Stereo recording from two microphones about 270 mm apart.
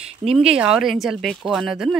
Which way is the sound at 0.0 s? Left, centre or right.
Right.